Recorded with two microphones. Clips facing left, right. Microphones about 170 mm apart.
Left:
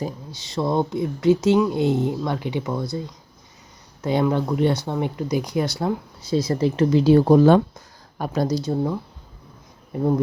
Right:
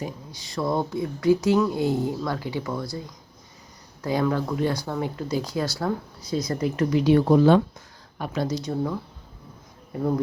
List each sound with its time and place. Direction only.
0.3 s speech: 25° left (ahead or behind)
4.0 s speech: 20° left (ahead or behind)